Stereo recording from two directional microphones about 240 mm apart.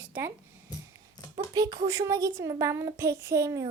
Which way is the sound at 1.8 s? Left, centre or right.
Centre.